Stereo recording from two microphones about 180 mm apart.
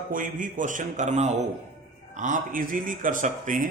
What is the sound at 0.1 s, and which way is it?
A man's voice, 50° right (ahead or behind).